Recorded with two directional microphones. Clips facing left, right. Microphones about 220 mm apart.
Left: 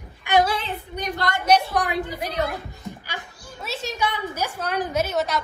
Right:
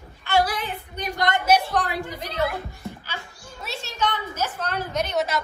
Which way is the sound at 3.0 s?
15° left (ahead or behind).